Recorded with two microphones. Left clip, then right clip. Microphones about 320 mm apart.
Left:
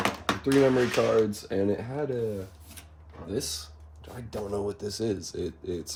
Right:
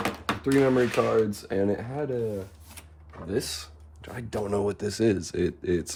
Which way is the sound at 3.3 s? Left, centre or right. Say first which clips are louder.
Right 3 dB; centre.